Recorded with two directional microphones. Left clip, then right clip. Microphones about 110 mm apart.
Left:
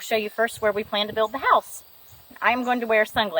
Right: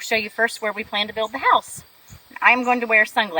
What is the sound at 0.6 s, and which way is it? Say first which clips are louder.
A woman's voice: left 1 dB; 30° left (ahead or behind).